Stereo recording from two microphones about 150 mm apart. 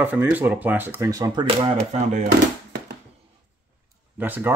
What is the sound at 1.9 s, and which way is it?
Speech, 50° right (ahead or behind).